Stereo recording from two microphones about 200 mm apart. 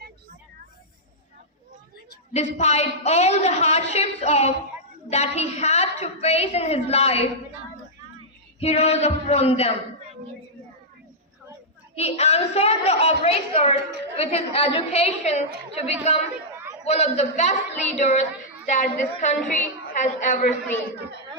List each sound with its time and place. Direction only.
2.3 s a woman's voice: 35° left (ahead or behind)
8.6 s a woman's voice: 30° left (ahead or behind)
11.9 s a woman's voice: 30° left (ahead or behind)